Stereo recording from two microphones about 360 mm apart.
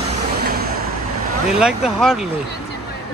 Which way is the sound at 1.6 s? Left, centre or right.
Centre.